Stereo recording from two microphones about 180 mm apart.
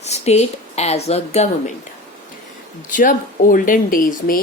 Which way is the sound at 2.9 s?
45° left (ahead or behind).